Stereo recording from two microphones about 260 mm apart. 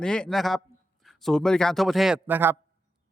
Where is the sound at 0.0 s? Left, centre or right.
Centre.